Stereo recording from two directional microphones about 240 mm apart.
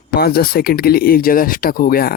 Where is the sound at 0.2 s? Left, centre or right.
Left.